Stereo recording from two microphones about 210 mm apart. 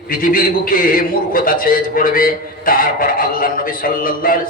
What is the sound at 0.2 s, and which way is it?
A man's voice, 40° left (ahead or behind).